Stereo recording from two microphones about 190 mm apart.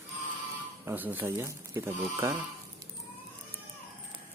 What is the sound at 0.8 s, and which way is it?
Speech, 10° right (ahead or behind).